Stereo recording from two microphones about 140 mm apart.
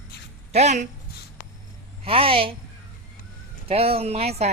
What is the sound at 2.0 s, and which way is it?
Speech, 40° right (ahead or behind).